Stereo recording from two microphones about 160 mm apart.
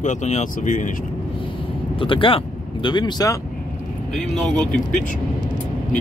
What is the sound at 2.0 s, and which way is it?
Speech, 35° left (ahead or behind).